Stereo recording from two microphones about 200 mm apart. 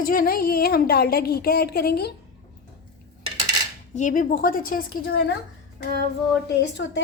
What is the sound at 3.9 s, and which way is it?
A child's voice, 40° left (ahead or behind).